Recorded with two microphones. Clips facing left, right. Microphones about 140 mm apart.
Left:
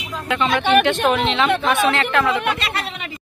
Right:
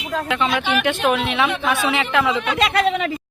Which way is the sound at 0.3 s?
5° right (ahead or behind).